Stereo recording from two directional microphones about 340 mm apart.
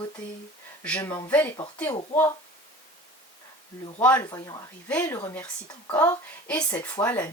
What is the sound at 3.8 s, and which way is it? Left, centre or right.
A woman's voice, centre.